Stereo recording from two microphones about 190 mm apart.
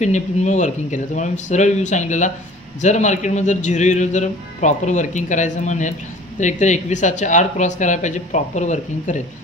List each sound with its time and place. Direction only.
0.0 s speech: 40° left (ahead or behind)